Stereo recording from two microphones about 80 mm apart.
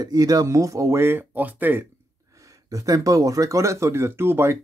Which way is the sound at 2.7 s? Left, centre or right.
Right.